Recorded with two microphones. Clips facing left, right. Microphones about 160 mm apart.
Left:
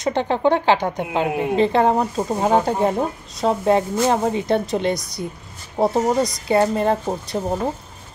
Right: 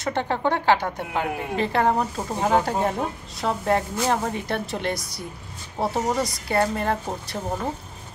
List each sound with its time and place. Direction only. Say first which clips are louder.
0.0 s speech: left 5 dB; 20° left (ahead or behind)